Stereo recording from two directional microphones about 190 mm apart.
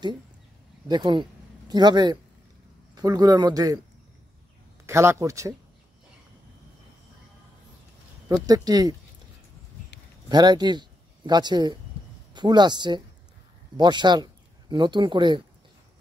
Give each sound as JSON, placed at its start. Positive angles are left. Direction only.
{"t": 0.8, "sound": "a man's voice", "side_deg": -20}
{"t": 4.8, "sound": "speech", "side_deg": -15}
{"t": 8.3, "sound": "a man's voice", "side_deg": -20}
{"t": 10.2, "sound": "a man's voice", "side_deg": -20}